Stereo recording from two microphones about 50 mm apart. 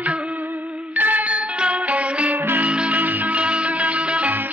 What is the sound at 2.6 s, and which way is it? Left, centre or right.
Music, right.